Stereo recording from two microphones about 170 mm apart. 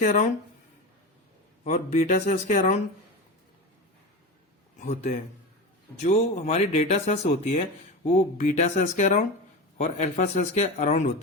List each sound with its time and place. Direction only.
0.0 s speech: 45° left (ahead or behind)
1.6 s speech: 45° left (ahead or behind)
4.8 s speech: 45° left (ahead or behind)